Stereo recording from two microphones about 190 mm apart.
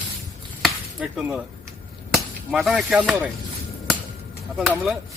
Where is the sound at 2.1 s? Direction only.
Centre (ahead or behind).